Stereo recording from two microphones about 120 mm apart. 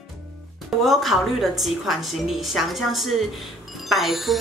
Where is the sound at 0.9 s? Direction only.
Centre (ahead or behind).